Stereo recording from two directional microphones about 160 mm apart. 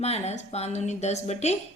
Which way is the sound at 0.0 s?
45° left (ahead or behind).